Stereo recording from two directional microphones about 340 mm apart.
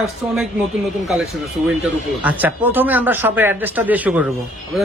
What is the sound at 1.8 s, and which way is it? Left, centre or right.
A man's voice, centre.